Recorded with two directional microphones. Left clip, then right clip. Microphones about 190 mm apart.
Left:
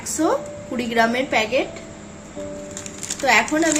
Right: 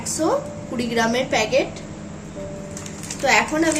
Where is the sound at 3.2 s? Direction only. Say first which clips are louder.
Left 1 dB; 50° left (ahead or behind).